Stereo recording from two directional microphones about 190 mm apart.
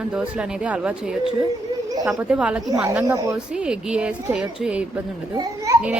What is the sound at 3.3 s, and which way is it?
A woman's voice, 5° right (ahead or behind).